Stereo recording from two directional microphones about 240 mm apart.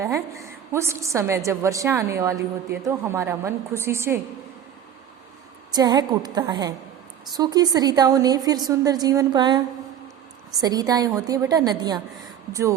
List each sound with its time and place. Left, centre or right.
0.0 s a woman's voice: centre
5.7 s a woman's voice: centre
10.6 s a woman's voice: centre